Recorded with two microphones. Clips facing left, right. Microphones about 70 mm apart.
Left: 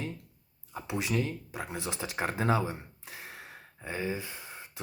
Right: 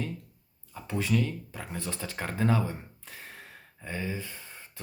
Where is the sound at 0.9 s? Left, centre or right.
Centre.